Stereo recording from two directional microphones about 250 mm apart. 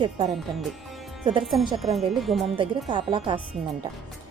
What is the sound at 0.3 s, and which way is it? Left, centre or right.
Speech, centre.